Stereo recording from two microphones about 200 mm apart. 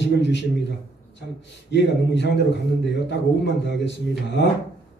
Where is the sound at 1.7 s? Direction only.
60° left (ahead or behind).